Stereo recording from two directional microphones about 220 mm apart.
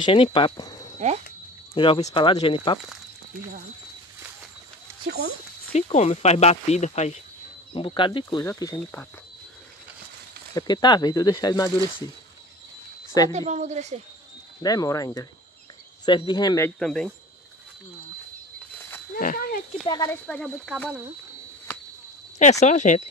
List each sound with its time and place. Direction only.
0.0 s speech: 25° left (ahead or behind)
1.0 s speech: 30° right (ahead or behind)
1.7 s speech: 25° left (ahead or behind)
5.7 s speech: 30° left (ahead or behind); by 9.0 s 10° left (ahead or behind)
10.5 s speech: 20° left (ahead or behind)
13.3 s a woman's voice: 30° right (ahead or behind)
14.6 s speech: 15° left (ahead or behind)
19.1 s speech: 40° left (ahead or behind)
19.9 s speech: 15° left (ahead or behind)
20.2 s speech: 5° left (ahead or behind)
22.4 s speech: 30° left (ahead or behind)